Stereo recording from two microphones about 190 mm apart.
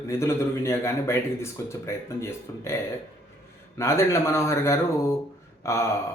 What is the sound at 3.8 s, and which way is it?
Speech, 15° left (ahead or behind).